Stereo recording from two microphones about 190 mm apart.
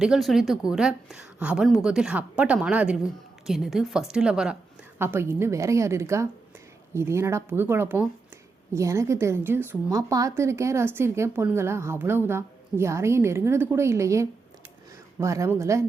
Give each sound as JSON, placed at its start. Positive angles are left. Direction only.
{"t": 0.0, "sound": "a woman's voice", "side_deg": 0}